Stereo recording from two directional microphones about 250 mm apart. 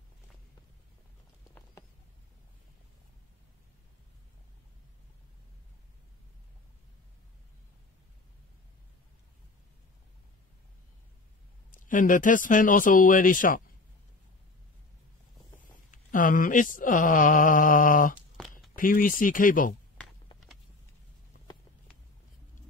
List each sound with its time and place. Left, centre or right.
11.7 s speech: left
15.9 s speech: left